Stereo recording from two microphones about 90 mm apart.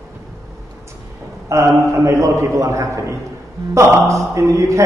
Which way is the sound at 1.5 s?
35° right (ahead or behind).